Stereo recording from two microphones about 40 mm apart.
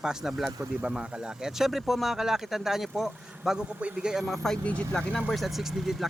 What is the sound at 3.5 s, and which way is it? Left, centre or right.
Speech, right.